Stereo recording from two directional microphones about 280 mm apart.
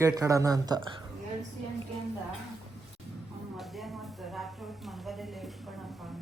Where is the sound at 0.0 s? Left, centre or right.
Centre.